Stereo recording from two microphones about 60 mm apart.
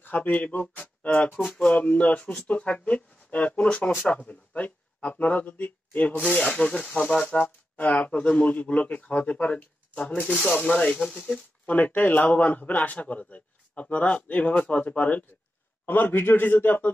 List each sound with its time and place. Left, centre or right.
0.0 s a man's voice: left
7.3 s a man's voice: left
15.8 s a man's voice: left